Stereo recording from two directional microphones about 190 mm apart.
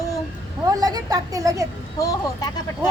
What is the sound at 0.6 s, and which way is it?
Speech, 20° right (ahead or behind).